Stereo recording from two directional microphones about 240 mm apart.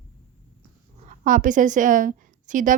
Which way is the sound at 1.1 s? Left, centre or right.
Right.